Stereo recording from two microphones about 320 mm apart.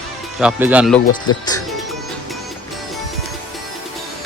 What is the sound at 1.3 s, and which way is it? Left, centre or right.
Speech, centre.